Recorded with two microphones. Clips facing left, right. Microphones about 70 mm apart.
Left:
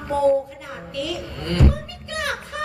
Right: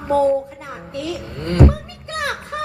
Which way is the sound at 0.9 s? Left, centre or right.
Right.